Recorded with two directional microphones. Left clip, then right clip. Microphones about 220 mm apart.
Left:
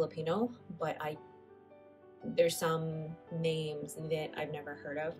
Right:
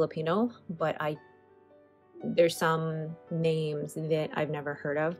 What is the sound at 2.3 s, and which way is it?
Speech, 10° right (ahead or behind).